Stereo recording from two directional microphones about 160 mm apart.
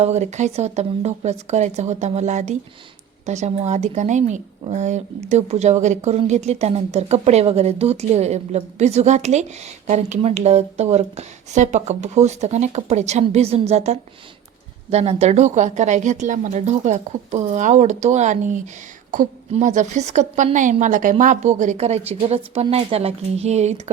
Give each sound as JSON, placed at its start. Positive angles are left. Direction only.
{"t": 0.0, "sound": "a woman's voice", "side_deg": -45}